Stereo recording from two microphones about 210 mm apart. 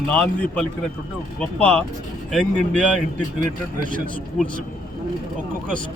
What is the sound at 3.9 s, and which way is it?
Speech, 40° right (ahead or behind).